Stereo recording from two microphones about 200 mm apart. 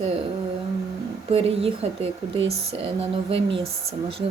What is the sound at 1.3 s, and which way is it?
Speech, 30° right (ahead or behind).